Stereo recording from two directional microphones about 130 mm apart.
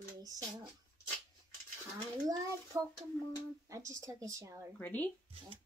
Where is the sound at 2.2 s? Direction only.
25° right (ahead or behind).